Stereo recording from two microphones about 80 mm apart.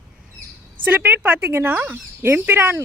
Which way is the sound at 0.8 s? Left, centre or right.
Right.